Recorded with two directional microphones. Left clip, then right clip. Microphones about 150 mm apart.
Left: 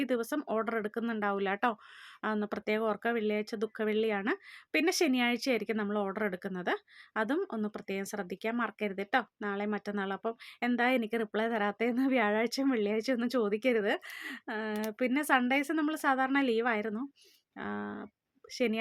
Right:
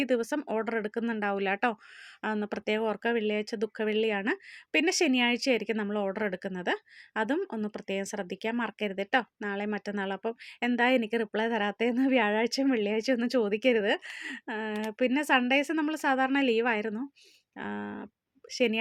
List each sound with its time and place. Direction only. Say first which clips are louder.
0.0 s speech: right 4 dB; 20° right (ahead or behind)